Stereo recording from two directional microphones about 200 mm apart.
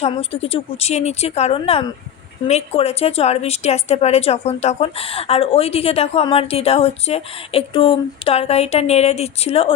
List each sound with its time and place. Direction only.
0.0 s speech: 30° left (ahead or behind)